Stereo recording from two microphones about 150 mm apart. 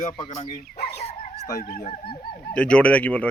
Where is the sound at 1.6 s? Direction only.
60° left (ahead or behind).